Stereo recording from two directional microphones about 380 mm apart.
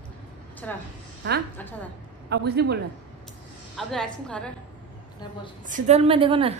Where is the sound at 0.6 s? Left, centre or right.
Centre.